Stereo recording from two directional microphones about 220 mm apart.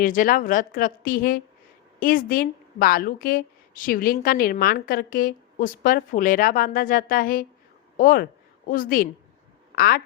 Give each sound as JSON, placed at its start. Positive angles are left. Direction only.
{"t": 0.0, "sound": "a woman's voice", "side_deg": 40}